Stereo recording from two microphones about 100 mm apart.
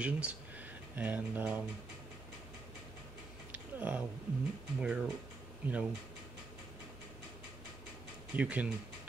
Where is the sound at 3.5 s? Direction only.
15° right (ahead or behind).